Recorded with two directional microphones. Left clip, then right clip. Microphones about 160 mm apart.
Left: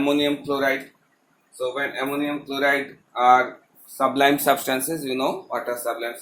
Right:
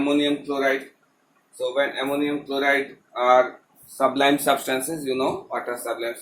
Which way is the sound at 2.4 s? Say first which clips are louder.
Left 1 dB; 35° left (ahead or behind).